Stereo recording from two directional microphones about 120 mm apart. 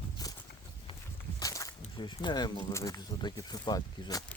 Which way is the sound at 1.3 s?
30° left (ahead or behind).